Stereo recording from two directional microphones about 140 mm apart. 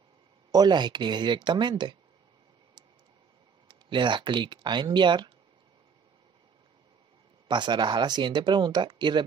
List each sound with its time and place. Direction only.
0.5 s speech: 30° right (ahead or behind)
3.6 s speech: 35° right (ahead or behind)
7.4 s speech: 35° right (ahead or behind)